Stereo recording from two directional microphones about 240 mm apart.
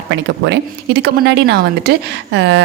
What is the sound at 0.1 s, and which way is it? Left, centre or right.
Speech, right.